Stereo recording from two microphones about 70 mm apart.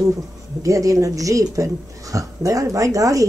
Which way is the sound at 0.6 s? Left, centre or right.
Right.